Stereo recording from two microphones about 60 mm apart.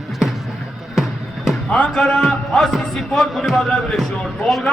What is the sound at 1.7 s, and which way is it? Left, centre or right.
A man's voice, centre.